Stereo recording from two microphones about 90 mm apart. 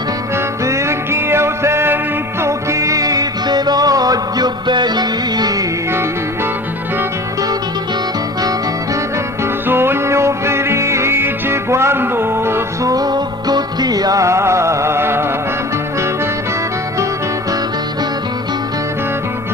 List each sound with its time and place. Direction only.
0.6 s music: 30° right (ahead or behind)
9.4 s music: 25° right (ahead or behind)
12.9 s music: 45° right (ahead or behind); by 15.3 s 25° right (ahead or behind)